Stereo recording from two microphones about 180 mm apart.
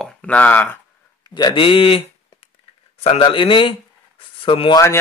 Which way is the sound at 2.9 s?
35° left (ahead or behind).